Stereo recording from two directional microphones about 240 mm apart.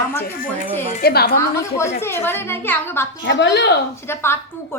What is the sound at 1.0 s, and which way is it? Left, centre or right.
Speech, left.